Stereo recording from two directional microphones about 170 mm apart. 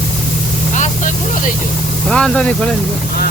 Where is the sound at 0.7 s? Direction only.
45° left (ahead or behind).